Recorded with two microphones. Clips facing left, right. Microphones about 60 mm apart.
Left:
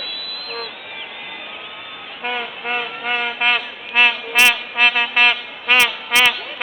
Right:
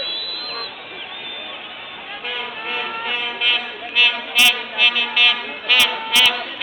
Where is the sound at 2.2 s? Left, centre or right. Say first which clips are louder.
Left 4 dB; left.